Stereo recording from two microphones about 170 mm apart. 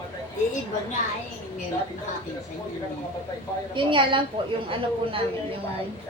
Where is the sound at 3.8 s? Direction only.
30° right (ahead or behind).